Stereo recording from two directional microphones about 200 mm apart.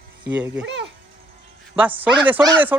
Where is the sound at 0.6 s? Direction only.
65° right (ahead or behind).